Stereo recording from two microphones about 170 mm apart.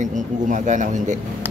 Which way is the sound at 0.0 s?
45° right (ahead or behind).